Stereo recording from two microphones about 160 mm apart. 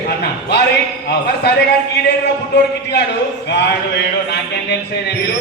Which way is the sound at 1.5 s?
90° left.